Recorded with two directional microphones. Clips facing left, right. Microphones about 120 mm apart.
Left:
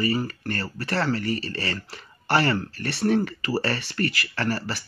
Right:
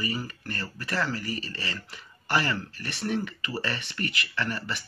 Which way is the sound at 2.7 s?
35° left (ahead or behind).